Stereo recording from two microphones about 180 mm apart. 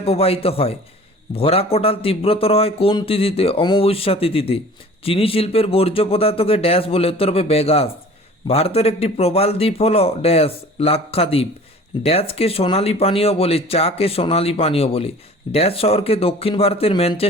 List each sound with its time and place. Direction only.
0.0 s a man's voice: 35° left (ahead or behind)